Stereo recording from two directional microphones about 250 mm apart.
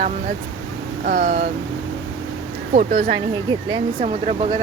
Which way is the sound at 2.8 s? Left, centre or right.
Right.